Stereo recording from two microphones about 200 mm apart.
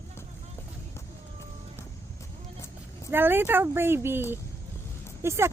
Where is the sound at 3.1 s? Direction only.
10° right (ahead or behind).